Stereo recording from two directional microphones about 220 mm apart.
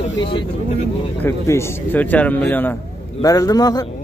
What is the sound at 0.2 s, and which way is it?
Speech, 20° left (ahead or behind).